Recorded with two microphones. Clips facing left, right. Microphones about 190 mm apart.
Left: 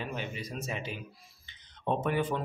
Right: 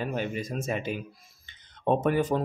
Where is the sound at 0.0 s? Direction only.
45° right (ahead or behind).